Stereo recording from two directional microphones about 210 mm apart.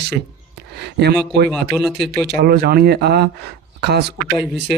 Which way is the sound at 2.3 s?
50° right (ahead or behind).